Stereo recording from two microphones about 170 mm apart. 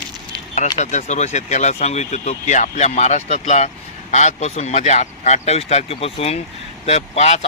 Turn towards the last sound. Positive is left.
turn(degrees=40)  # may be behind; listen again after turning